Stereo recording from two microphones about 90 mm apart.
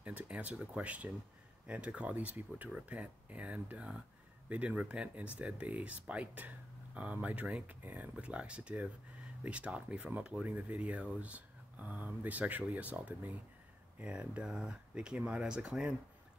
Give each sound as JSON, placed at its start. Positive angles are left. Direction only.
{"t": 0.0, "sound": "speech", "side_deg": -15}